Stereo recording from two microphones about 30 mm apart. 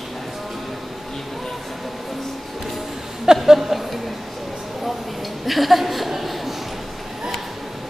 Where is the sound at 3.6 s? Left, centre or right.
Centre.